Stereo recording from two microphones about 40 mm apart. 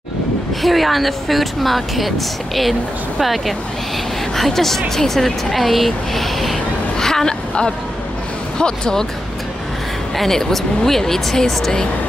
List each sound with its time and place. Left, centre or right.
0.6 s speech: centre
7.0 s a sound: centre
8.5 s speech: centre
10.1 s speech: centre